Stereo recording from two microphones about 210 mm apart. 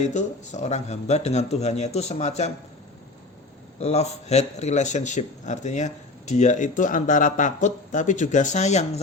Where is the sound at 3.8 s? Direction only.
30° left (ahead or behind).